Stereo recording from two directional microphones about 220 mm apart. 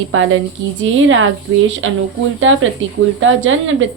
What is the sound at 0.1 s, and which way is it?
A woman's voice, 65° right (ahead or behind).